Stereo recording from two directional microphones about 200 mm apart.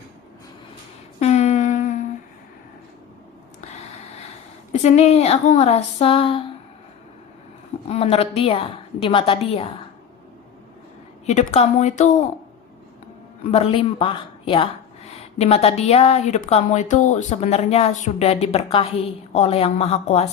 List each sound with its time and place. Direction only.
1.2 s humming: 35° left (ahead or behind)
3.6 s a sound: 35° left (ahead or behind)
4.7 s speech: 35° left (ahead or behind)
7.9 s a woman's voice: 30° left (ahead or behind)
11.3 s speech: 35° left (ahead or behind)
13.5 s speech: 30° left (ahead or behind)